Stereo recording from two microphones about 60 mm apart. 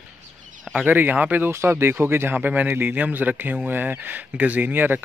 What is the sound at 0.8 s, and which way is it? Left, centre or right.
Speech, right.